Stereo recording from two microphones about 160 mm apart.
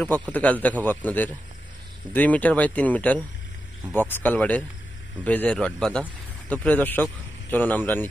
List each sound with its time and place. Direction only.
0.3 s speech: 10° left (ahead or behind)